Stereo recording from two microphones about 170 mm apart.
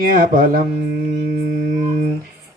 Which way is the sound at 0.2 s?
55° right (ahead or behind).